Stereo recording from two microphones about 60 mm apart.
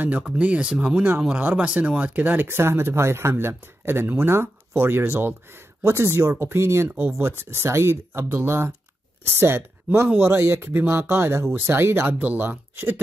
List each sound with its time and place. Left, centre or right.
0.4 s speech: right
12.2 s speech: right